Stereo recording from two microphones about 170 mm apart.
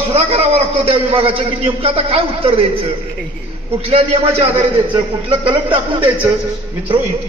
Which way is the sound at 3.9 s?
35° right (ahead or behind).